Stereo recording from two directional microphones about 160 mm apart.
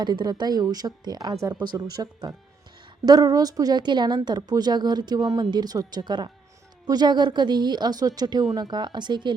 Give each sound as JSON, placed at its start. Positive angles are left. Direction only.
{"t": 0.0, "sound": "a woman's voice", "side_deg": -25}